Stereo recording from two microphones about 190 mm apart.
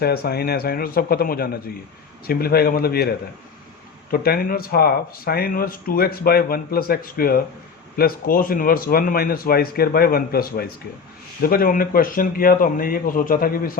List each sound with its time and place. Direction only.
0.0 s speech: 55° left (ahead or behind)